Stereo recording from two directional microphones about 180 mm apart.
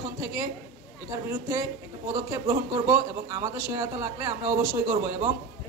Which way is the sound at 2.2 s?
15° right (ahead or behind).